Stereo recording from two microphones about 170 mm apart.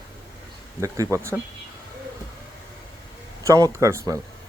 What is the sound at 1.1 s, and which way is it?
Speech, 15° right (ahead or behind).